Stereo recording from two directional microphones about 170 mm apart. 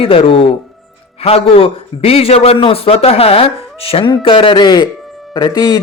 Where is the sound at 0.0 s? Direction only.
35° left (ahead or behind).